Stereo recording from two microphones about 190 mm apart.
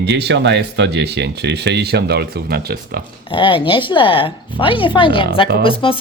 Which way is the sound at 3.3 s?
25° left (ahead or behind).